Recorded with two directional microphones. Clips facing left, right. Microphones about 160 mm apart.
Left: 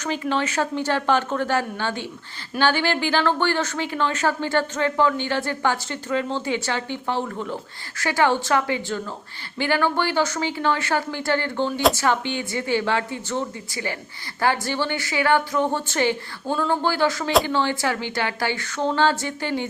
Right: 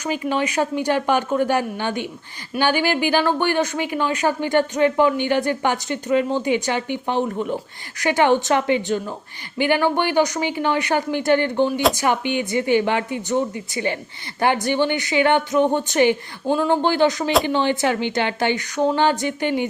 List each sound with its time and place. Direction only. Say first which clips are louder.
0.0 s speech: right 2 dB; 10° right (ahead or behind)